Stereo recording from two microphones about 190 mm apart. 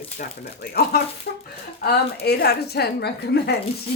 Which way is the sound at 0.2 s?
50° left (ahead or behind).